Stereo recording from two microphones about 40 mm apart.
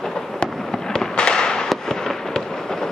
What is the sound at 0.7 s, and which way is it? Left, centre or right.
Fireworks, centre.